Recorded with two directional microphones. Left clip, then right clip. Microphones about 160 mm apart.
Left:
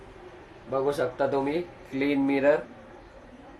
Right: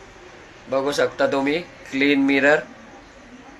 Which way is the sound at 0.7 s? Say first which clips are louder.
Right 6 dB; 10° left (ahead or behind).